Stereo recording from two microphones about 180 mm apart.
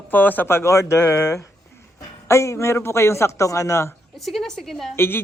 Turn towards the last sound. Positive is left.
turn(degrees=10)  # may be behind; listen again after turning